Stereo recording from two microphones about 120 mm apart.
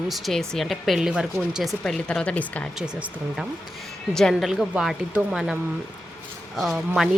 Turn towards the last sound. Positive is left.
turn(degrees=0)  # may be behind; listen again after turning